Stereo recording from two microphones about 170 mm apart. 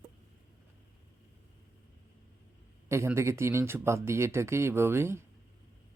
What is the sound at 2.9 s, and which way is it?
Speech, 15° right (ahead or behind).